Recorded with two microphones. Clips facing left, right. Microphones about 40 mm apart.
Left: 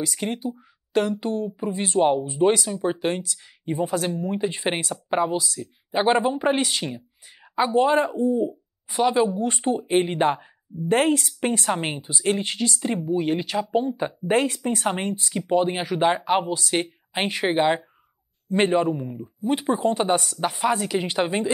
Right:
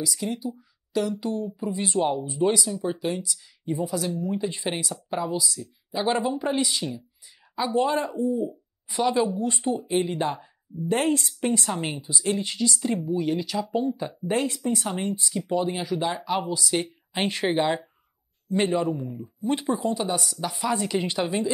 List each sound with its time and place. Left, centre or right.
0.0 s speech: left
8.5 s speech: left
19.1 s speech: centre
19.7 s speech: left